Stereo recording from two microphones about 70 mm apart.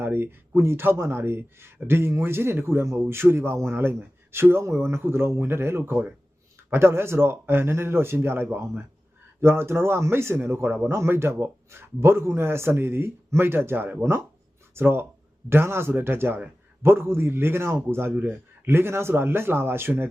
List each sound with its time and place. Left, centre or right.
0.0 s speech: right
18.1 s speech: right